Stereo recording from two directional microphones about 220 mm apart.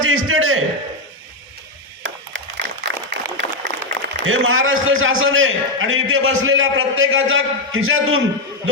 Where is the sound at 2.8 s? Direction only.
50° right (ahead or behind).